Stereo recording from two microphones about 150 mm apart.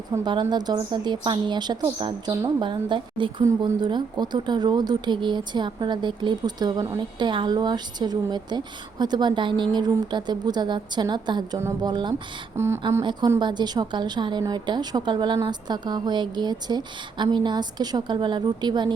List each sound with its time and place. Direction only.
0.3 s a woman's voice: 30° right (ahead or behind)
12.5 s speech: 15° right (ahead or behind)
13.0 s a woman's voice: 30° right (ahead or behind)